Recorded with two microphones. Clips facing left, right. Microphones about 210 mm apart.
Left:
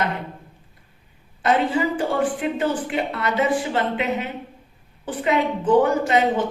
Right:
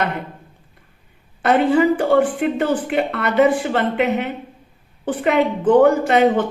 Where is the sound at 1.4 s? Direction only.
60° right (ahead or behind).